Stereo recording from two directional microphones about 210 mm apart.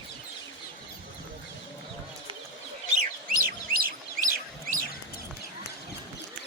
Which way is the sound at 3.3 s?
45° right (ahead or behind).